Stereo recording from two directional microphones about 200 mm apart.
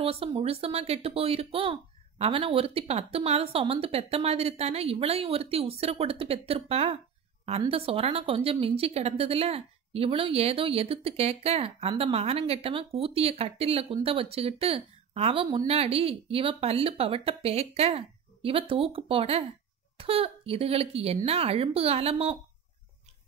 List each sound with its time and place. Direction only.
0.0 s a woman's voice: 30° right (ahead or behind)